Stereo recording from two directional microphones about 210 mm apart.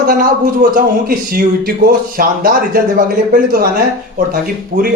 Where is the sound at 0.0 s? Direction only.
45° right (ahead or behind).